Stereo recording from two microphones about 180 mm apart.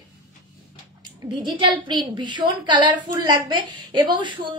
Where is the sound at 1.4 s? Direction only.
25° right (ahead or behind).